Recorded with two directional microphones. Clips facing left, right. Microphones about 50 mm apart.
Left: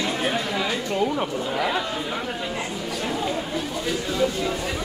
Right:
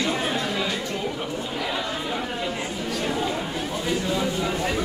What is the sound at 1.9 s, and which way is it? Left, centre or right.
Chatter, centre.